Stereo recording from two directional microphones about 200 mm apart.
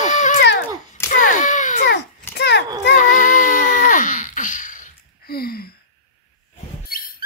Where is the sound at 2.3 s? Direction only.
55° left (ahead or behind).